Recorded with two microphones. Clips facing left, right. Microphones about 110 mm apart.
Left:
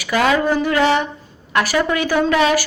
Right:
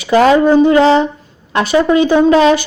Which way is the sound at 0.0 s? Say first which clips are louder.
Right 8 dB; 30° right (ahead or behind).